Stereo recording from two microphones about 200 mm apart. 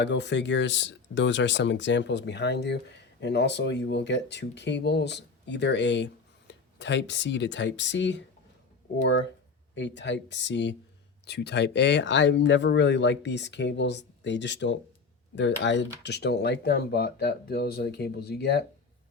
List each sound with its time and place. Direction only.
0.0 s speech: 60° left (ahead or behind)
9.7 s speech: 60° left (ahead or behind)